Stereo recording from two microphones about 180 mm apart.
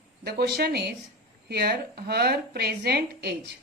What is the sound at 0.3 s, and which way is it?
Speech, 60° right (ahead or behind).